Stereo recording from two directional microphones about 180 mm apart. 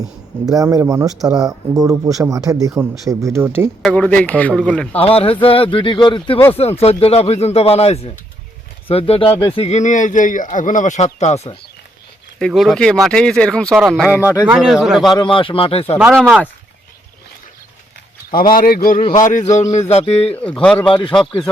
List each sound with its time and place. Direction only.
0.0 s speech: 20° right (ahead or behind)
3.8 s speech: 5° left (ahead or behind)
4.9 s a man's voice: 30° left (ahead or behind)
9.3 s speech: 15° left (ahead or behind)
9.6 s speech: 40° left (ahead or behind)
12.4 s speech: centre (ahead or behind)
14.1 s speech: 15° left (ahead or behind)
14.3 s speech: 5° right (ahead or behind)
15.1 s speech: 25° left (ahead or behind)
16.1 s speech: 5° left (ahead or behind)
18.5 s speech: 55° left (ahead or behind)
19.6 s speech: 15° left (ahead or behind)
19.9 s a man's voice: 35° left (ahead or behind)
20.3 s speech: 5° left (ahead or behind)